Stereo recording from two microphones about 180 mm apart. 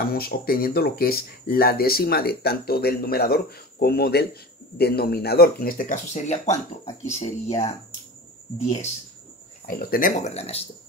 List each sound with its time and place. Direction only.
0.1 s speech: 55° left (ahead or behind); by 7.6 s 35° left (ahead or behind)
9.7 s speech: 50° left (ahead or behind)